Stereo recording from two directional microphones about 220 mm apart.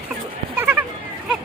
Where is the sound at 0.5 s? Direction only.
10° right (ahead or behind).